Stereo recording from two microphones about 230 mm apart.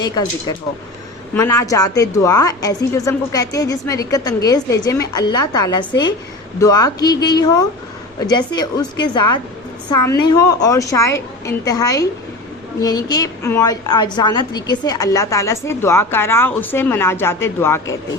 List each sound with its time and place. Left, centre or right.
1.3 s a woman's voice: centre